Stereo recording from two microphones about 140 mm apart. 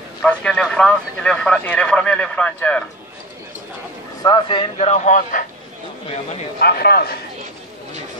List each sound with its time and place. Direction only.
0.2 s a man's voice: 10° left (ahead or behind)
4.2 s speech: 35° left (ahead or behind)
4.7 s speech: 55° left (ahead or behind)
6.6 s a man's voice: 90° left